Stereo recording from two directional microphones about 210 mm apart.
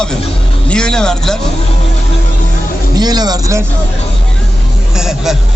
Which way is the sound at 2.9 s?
20° right (ahead or behind).